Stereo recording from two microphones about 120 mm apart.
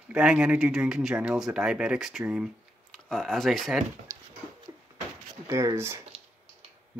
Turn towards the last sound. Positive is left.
turn(degrees=-25)  # may be behind; listen again after turning